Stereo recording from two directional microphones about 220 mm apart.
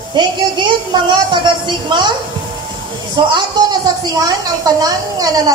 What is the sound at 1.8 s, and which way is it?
Speech, 20° right (ahead or behind).